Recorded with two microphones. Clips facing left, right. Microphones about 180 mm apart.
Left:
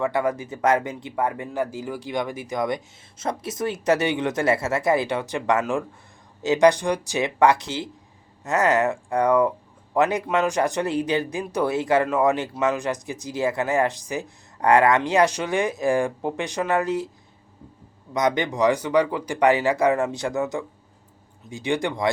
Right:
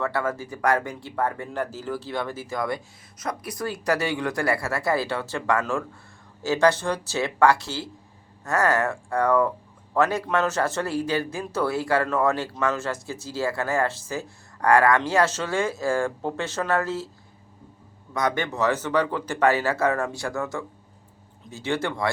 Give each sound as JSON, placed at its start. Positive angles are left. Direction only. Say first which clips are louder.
{"t": 0.0, "sound": "speech", "louder": "left 3 dB", "side_deg": 15}
{"t": 18.1, "sound": "speech", "louder": "left 3 dB", "side_deg": 20}